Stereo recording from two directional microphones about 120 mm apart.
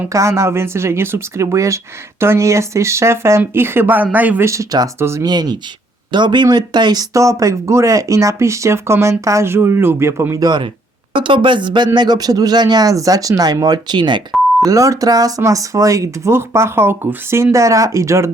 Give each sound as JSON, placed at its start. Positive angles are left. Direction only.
{"t": 0.1, "sound": "speech", "side_deg": -25}
{"t": 5.2, "sound": "speech", "side_deg": -35}
{"t": 14.6, "sound": "speech", "side_deg": -30}